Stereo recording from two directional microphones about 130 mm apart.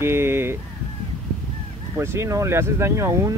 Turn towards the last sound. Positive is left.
turn(degrees=-20)  # may be behind; listen again after turning